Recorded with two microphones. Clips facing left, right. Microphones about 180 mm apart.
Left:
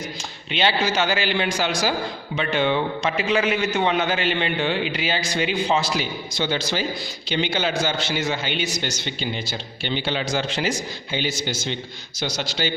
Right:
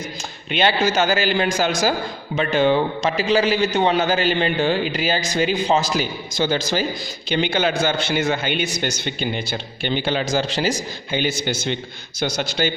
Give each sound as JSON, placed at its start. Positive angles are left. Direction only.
{"t": 0.5, "sound": "a man's voice", "side_deg": -50}